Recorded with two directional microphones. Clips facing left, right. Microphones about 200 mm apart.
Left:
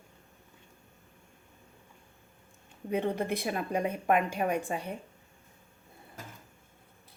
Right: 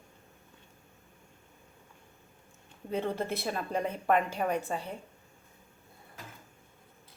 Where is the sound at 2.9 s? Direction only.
15° left (ahead or behind).